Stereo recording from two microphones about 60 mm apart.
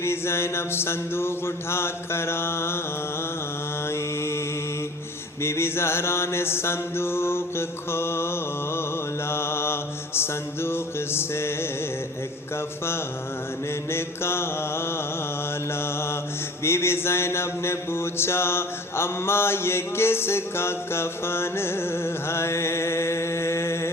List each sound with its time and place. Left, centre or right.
0.0 s mantra: left
3.8 s mantra: left
13.9 s mantra: left